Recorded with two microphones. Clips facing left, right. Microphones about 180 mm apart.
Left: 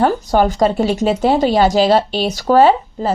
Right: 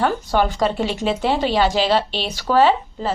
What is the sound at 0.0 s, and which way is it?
Speech, 40° left (ahead or behind).